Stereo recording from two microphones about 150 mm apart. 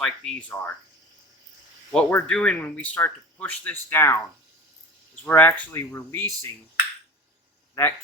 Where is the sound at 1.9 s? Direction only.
5° left (ahead or behind).